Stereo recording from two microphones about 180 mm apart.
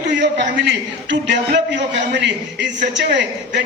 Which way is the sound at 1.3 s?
75° right (ahead or behind).